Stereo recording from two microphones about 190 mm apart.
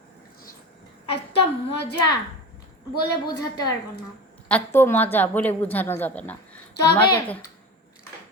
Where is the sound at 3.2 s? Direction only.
20° left (ahead or behind).